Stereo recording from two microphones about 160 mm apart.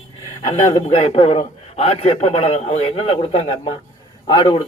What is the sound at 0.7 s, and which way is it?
A man's voice, 40° left (ahead or behind).